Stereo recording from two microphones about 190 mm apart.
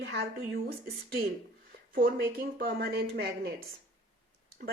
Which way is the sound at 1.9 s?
50° right (ahead or behind).